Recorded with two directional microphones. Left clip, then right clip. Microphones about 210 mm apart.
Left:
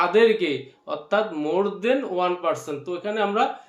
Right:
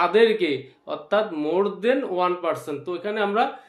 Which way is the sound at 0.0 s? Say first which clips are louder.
Even; 20° right (ahead or behind).